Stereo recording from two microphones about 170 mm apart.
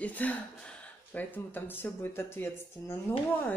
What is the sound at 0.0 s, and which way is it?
Speech, 10° left (ahead or behind).